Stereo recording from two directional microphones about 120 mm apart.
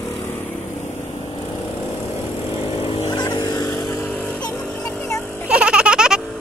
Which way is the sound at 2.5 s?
45° left (ahead or behind).